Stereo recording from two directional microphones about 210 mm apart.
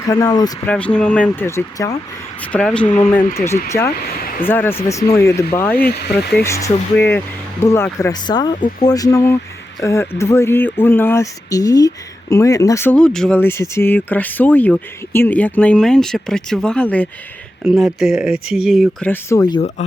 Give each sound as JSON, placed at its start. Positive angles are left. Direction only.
{"t": 0.1, "sound": "speech", "side_deg": 20}
{"t": 0.7, "sound": "speech", "side_deg": 5}
{"t": 4.0, "sound": "a sound", "side_deg": 45}
{"t": 4.4, "sound": "speech", "side_deg": 10}